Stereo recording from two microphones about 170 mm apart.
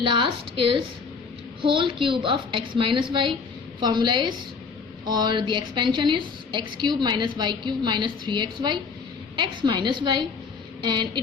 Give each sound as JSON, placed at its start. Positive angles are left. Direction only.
{"t": 0.1, "sound": "a woman's voice", "side_deg": -30}